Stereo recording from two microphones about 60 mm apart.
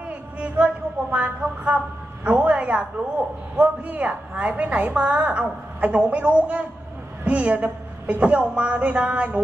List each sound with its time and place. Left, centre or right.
0.4 s speech: right
2.2 s a sound: right
3.5 s a woman's voice: right